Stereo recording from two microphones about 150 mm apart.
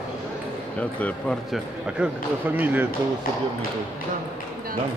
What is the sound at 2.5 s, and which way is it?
Speech, 10° right (ahead or behind).